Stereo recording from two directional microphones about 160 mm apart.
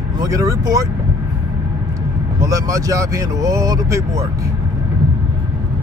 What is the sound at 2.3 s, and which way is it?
Speech, 20° right (ahead or behind).